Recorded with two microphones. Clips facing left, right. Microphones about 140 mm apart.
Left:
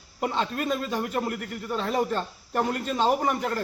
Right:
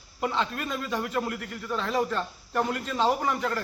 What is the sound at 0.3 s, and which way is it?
A man's voice, 35° left (ahead or behind).